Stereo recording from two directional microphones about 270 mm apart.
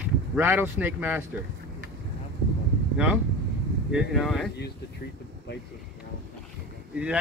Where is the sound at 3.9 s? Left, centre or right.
Centre.